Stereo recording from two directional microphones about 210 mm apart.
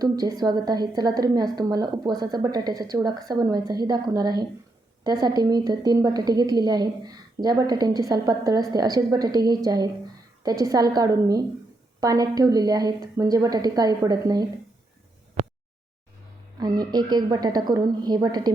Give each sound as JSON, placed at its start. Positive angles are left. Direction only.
{"t": 0.0, "sound": "a woman's voice", "side_deg": -20}
{"t": 16.6, "sound": "a woman's voice", "side_deg": -20}